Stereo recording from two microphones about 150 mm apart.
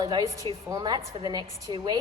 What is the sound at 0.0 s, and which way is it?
A woman's voice, 30° right (ahead or behind).